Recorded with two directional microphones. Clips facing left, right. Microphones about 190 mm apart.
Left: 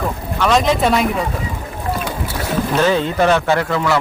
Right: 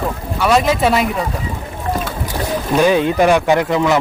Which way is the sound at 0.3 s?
5° right (ahead or behind).